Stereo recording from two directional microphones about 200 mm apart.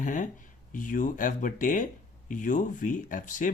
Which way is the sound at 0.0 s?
40° left (ahead or behind).